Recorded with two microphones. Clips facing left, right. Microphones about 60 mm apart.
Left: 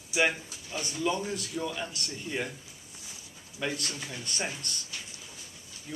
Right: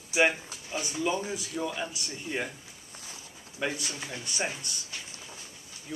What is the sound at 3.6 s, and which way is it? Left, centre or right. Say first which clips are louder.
Speech: right 1 dB; centre.